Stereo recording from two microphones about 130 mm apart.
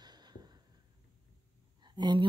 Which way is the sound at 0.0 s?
35° right (ahead or behind).